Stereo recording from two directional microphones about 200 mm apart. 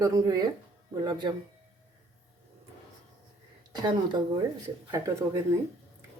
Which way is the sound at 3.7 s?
20° right (ahead or behind).